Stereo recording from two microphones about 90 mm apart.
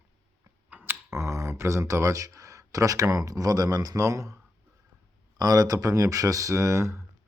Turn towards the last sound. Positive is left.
turn(degrees=-35)  # may be behind; listen again after turning